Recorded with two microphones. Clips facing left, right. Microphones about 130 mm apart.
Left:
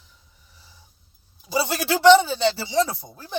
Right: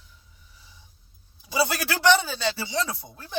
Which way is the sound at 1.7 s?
20° left (ahead or behind).